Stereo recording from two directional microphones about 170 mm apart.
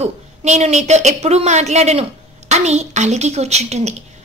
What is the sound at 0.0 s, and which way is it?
A woman's voice, 40° right (ahead or behind).